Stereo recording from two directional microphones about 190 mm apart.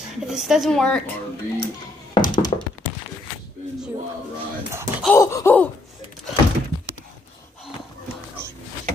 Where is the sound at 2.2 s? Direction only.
25° left (ahead or behind).